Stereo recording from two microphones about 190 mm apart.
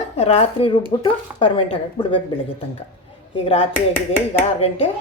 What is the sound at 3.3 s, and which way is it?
Speech, 30° left (ahead or behind).